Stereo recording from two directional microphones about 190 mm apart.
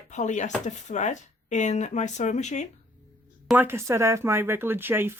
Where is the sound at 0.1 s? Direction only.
40° left (ahead or behind).